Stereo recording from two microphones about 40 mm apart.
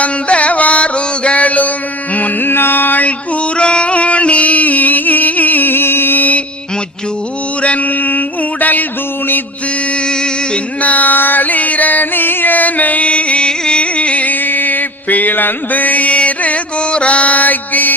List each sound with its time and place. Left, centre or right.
0.0 s music: left
2.5 s music: left
3.6 s music: left
10.8 s music: left
14.4 s mantra: left